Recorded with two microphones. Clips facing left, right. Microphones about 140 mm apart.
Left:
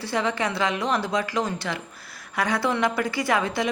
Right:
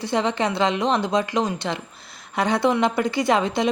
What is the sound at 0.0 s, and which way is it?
A woman's voice, 20° right (ahead or behind).